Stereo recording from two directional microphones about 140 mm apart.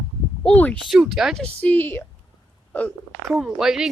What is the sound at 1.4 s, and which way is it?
Speech, 10° left (ahead or behind).